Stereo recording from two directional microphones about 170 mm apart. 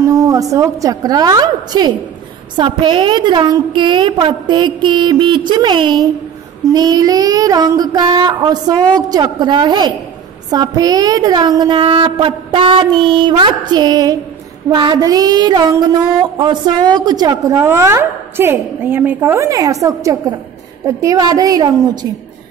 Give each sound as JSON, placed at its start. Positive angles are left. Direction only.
{"t": 0.0, "sound": "a woman's voice", "side_deg": -20}
{"t": 2.5, "sound": "child singing", "side_deg": -25}